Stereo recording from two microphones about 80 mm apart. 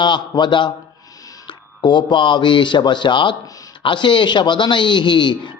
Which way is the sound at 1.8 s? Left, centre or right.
Left.